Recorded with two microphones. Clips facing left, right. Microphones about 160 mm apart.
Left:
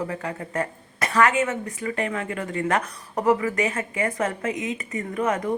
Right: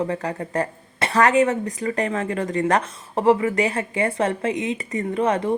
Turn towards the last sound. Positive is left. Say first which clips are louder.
# right 4 dB
turn(degrees=-30)  # may be behind; listen again after turning